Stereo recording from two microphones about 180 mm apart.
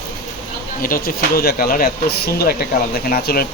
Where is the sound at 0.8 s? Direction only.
55° left (ahead or behind).